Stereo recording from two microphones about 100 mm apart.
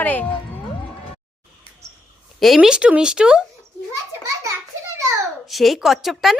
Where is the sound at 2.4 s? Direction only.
5° right (ahead or behind).